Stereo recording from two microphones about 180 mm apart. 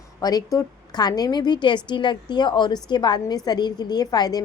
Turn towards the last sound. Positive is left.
turn(degrees=20)  # may be behind; listen again after turning